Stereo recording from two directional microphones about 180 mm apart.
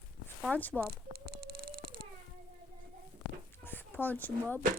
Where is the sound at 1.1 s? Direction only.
55° right (ahead or behind).